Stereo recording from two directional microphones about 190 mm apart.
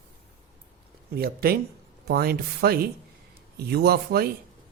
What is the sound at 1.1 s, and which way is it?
Speech, 55° right (ahead or behind).